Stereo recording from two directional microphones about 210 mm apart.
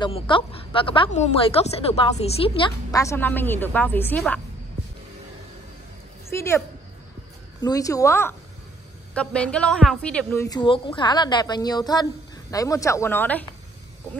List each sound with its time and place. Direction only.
0.0 s a woman's voice: 25° left (ahead or behind); by 4.4 s 10° left (ahead or behind)
7.6 s a woman's voice: 15° left (ahead or behind)